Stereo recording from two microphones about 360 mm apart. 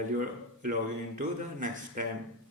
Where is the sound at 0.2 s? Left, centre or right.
Right.